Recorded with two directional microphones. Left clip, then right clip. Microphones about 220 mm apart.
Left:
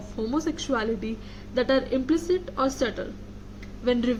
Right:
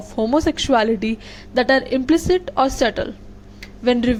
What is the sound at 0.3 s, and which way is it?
A woman's voice, 35° right (ahead or behind).